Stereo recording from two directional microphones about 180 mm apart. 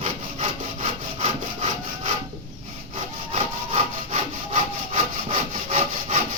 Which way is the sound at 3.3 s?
40° right (ahead or behind).